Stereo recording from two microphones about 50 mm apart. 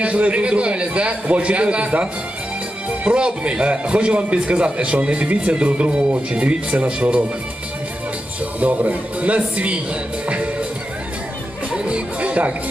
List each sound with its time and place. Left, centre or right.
0.0 s a man's voice: right
3.2 s a man's voice: centre
8.6 s a man's voice: right
10.2 s music: right
11.9 s music: right